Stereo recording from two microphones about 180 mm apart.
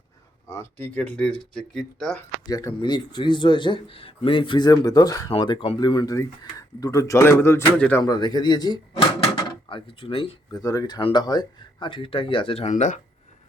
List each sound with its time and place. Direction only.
0.5 s speech: 10° left (ahead or behind)
2.1 s speech: 15° left (ahead or behind)
8.0 s speech: 20° left (ahead or behind); by 13.0 s 45° left (ahead or behind)